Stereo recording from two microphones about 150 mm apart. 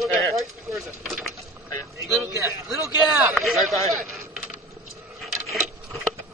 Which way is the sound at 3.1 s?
5° right (ahead or behind).